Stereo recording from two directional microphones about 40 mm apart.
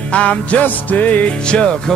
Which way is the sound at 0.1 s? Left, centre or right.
Left.